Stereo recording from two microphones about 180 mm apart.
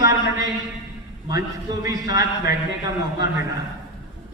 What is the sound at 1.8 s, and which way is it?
A man's voice, 20° right (ahead or behind).